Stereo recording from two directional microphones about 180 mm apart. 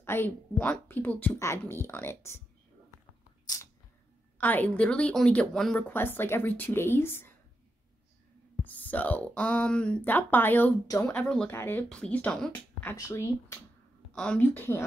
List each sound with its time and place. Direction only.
0.0 s speech: 10° left (ahead or behind)
3.5 s a sound: 20° left (ahead or behind)
4.4 s speech: 10° left (ahead or behind)
8.6 s speech: 10° left (ahead or behind)
14.1 s speech: 5° left (ahead or behind)